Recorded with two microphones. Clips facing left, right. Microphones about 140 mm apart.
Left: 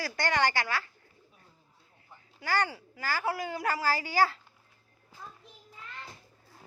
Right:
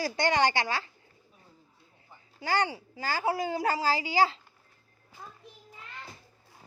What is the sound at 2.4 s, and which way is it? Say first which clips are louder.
A woman's voice: right 2 dB; 25° right (ahead or behind).